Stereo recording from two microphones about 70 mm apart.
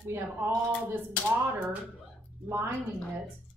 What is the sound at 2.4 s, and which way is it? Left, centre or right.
Speech, right.